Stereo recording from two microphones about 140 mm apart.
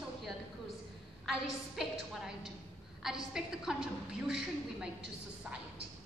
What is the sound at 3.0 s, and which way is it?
A woman's voice, centre (ahead or behind).